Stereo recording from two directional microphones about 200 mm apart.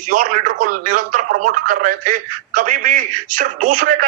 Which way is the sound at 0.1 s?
40° right (ahead or behind).